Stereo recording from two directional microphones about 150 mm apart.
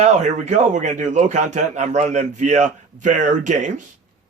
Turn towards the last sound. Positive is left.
turn(degrees=-55)  # may be behind; listen again after turning